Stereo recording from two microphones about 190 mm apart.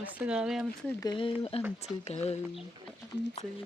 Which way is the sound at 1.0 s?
25° left (ahead or behind).